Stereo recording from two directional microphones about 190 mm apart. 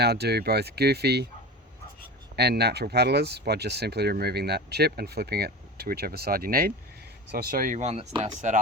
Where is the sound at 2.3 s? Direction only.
60° right (ahead or behind); by 8.6 s 40° right (ahead or behind).